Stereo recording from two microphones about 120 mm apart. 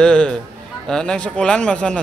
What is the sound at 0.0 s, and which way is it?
A man's voice, 10° left (ahead or behind).